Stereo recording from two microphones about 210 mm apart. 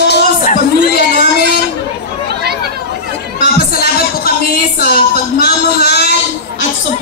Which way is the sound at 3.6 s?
45° left (ahead or behind).